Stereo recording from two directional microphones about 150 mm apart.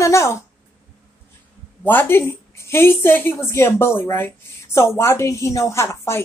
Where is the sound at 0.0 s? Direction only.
20° left (ahead or behind).